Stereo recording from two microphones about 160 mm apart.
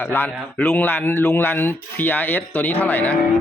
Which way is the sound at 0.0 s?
15° left (ahead or behind).